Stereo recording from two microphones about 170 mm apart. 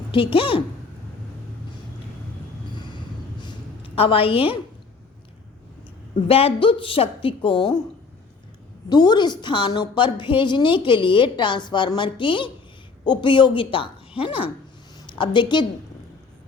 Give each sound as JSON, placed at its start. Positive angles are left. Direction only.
{"t": 0.1, "sound": "a woman's voice", "side_deg": 30}
{"t": 3.4, "sound": "a sound", "side_deg": 30}
{"t": 6.2, "sound": "a woman's voice", "side_deg": 35}
{"t": 8.9, "sound": "a woman's voice", "side_deg": 25}